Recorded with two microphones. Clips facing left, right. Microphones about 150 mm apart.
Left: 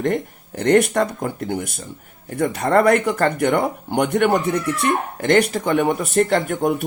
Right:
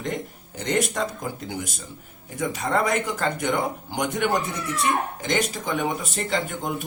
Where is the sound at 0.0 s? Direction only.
60° left (ahead or behind).